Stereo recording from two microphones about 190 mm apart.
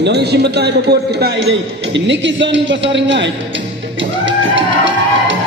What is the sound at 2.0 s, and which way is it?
A man's voice, 75° right (ahead or behind).